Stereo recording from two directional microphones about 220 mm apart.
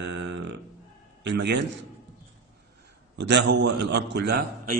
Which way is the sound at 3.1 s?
50° right (ahead or behind).